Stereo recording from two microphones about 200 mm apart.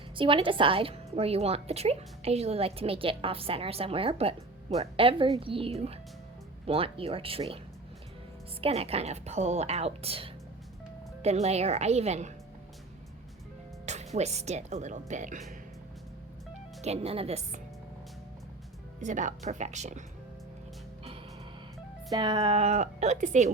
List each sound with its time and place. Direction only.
0.2 s a woman's voice: 25° right (ahead or behind)
8.6 s a woman's voice: 30° right (ahead or behind)
13.8 s a woman's voice: 35° right (ahead or behind)
16.8 s a woman's voice: 30° right (ahead or behind)
19.0 s a woman's voice: 40° right (ahead or behind)
22.1 s a woman's voice: 20° right (ahead or behind)